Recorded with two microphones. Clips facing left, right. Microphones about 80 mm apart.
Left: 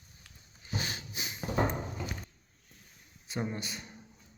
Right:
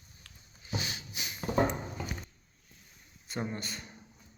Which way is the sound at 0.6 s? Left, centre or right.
Left.